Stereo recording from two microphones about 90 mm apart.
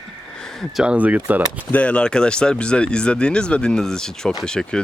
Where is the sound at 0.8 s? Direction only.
15° right (ahead or behind).